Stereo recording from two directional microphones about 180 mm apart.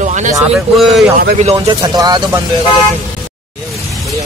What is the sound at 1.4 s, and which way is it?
Speech, 25° right (ahead or behind).